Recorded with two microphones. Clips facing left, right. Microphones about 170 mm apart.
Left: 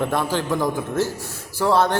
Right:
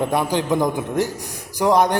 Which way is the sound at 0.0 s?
15° right (ahead or behind).